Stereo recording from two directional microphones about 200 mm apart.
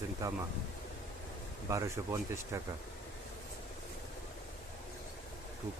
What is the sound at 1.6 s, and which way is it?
Speech, 15° right (ahead or behind).